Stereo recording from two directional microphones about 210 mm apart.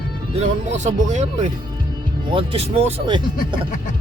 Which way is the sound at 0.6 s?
35° right (ahead or behind).